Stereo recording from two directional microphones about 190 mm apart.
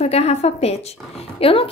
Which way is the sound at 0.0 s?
35° left (ahead or behind).